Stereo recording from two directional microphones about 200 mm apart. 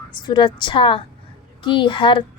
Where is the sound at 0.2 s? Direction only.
20° left (ahead or behind).